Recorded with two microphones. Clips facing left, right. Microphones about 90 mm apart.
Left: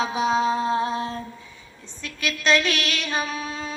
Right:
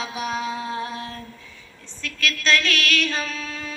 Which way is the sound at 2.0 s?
20° left (ahead or behind).